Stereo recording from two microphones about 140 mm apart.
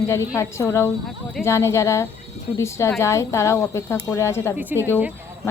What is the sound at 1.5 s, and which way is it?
A woman's voice, 20° left (ahead or behind).